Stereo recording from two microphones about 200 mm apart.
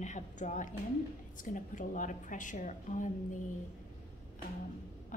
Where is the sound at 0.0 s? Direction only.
35° left (ahead or behind).